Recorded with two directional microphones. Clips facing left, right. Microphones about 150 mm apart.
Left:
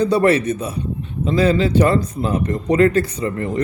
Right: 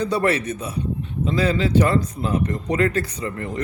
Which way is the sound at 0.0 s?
30° left (ahead or behind).